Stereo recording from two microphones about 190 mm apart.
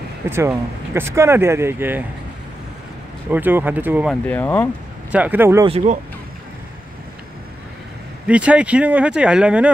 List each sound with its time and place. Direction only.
0.3 s speech: 10° right (ahead or behind)
3.3 s speech: 10° right (ahead or behind)
4.1 s speech: 10° left (ahead or behind)
5.1 s speech: 10° right (ahead or behind)
5.7 s speech: 30° right (ahead or behind)
8.3 s speech: 5° right (ahead or behind)